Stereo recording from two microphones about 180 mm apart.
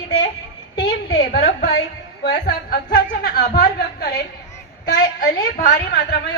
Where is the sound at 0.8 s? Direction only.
70° left (ahead or behind).